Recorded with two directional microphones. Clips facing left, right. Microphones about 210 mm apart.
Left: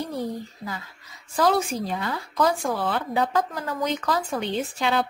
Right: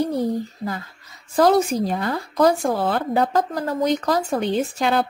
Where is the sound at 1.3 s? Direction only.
40° right (ahead or behind).